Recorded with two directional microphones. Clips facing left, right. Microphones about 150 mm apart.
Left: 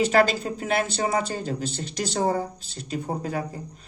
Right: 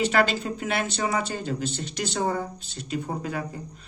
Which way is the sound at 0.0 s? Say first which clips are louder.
Left 3 dB; 40° left (ahead or behind).